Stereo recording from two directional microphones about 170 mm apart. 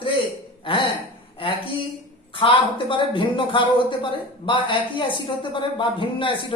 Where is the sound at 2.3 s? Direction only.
30° left (ahead or behind).